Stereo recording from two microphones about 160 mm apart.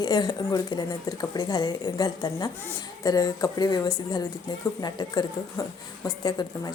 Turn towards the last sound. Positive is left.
turn(degrees=25)  # may be behind; listen again after turning